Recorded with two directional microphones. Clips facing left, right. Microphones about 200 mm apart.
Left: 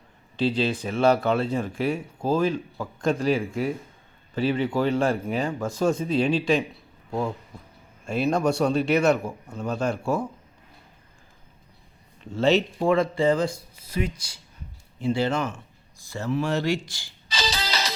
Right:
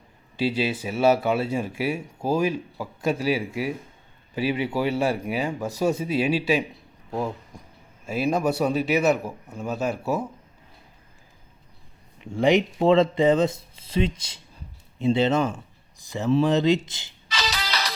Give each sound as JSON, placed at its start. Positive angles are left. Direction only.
{"t": 0.3, "sound": "a man's voice", "side_deg": -10}
{"t": 12.2, "sound": "speech", "side_deg": -15}
{"t": 17.2, "sound": "music", "side_deg": 30}